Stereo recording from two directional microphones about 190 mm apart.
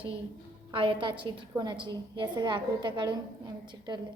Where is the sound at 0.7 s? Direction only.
25° right (ahead or behind).